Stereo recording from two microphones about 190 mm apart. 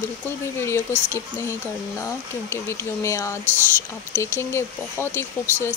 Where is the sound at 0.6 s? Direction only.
15° left (ahead or behind).